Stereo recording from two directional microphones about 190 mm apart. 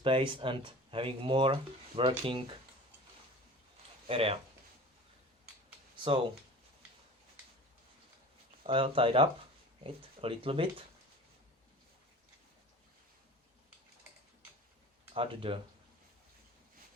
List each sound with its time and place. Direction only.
0.0 s speech: 25° right (ahead or behind)
4.1 s speech: 30° right (ahead or behind)
8.6 s speech: 30° right (ahead or behind)
15.1 s speech: 30° right (ahead or behind)